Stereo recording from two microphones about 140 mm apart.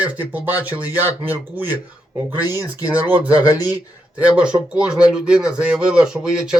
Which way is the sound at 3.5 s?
25° left (ahead or behind).